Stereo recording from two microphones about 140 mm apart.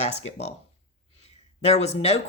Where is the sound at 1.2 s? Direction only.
50° left (ahead or behind).